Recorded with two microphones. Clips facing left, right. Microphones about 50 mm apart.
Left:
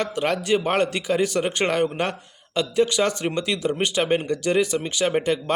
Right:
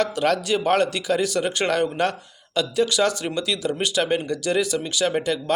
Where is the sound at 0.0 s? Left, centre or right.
Centre.